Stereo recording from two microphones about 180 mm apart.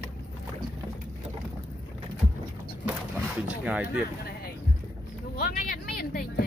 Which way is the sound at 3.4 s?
10° right (ahead or behind).